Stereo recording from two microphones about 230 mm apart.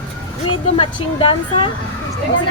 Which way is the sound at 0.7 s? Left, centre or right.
Left.